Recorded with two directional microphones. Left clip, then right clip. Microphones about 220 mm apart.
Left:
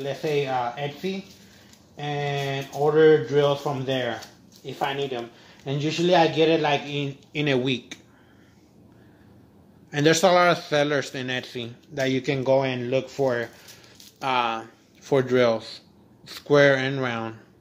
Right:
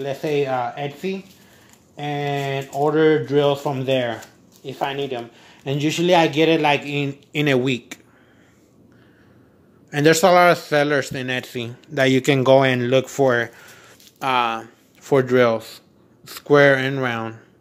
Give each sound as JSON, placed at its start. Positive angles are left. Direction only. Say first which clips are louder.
{"t": 0.0, "sound": "speech", "louder": "right 4 dB", "side_deg": -50}
{"t": 7.4, "sound": "speech", "louder": "right 4 dB", "side_deg": -30}
{"t": 9.8, "sound": "speech", "louder": "right 4 dB", "side_deg": -25}